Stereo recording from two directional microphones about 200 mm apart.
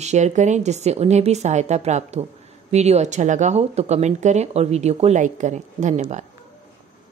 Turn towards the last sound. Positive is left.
turn(degrees=-35)  # may be behind; listen again after turning